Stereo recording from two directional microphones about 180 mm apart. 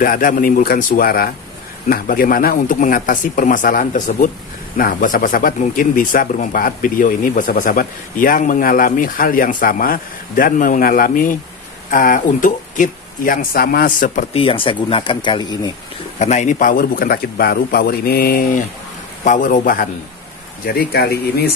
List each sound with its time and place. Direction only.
0.0 s speech: 50° left (ahead or behind)
14.3 s speech: 30° left (ahead or behind)
16.2 s a man's voice: 40° left (ahead or behind); by 21.5 s 60° left (ahead or behind)